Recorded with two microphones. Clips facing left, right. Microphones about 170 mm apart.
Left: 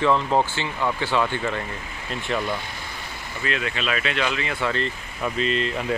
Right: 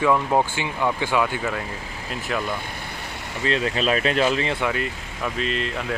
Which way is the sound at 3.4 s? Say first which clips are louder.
Right 5 dB; 30° right (ahead or behind).